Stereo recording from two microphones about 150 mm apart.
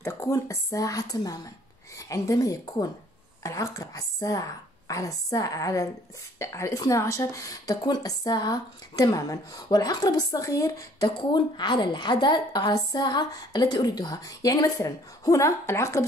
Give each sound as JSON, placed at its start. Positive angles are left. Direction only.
{"t": 0.0, "sound": "a woman's voice", "side_deg": 15}